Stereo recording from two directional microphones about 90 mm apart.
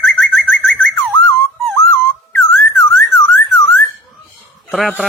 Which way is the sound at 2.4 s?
25° left (ahead or behind).